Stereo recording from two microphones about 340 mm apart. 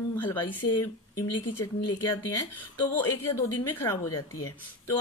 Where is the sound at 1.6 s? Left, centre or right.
Centre.